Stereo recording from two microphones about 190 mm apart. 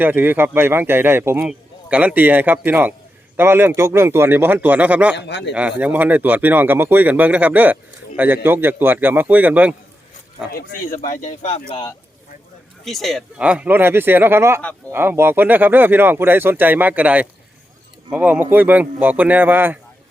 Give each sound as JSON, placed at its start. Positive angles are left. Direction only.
{"t": 0.0, "sound": "speech", "side_deg": -10}
{"t": 5.1, "sound": "speech", "side_deg": 65}
{"t": 5.5, "sound": "speech", "side_deg": -5}
{"t": 10.5, "sound": "speech", "side_deg": 45}
{"t": 12.8, "sound": "speech", "side_deg": 0}